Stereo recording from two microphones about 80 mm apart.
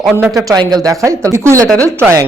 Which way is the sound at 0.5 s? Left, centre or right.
Right.